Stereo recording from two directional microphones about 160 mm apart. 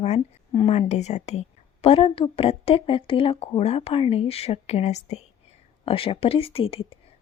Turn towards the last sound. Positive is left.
turn(degrees=35)  # may be behind; listen again after turning